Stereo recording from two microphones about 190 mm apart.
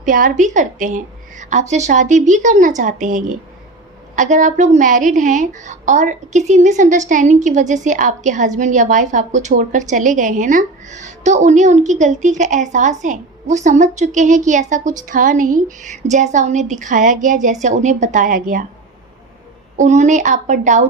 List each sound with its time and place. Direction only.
0.0 s a woman's voice: 45° right (ahead or behind)
19.7 s a woman's voice: 40° right (ahead or behind)